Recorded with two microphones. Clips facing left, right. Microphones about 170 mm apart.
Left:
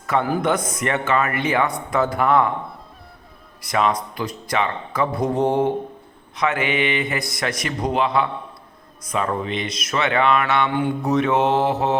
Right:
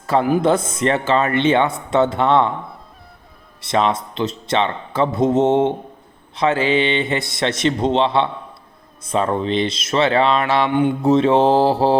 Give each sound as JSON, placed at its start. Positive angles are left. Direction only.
{"t": 0.1, "sound": "speech", "side_deg": -25}
{"t": 3.6, "sound": "speech", "side_deg": -30}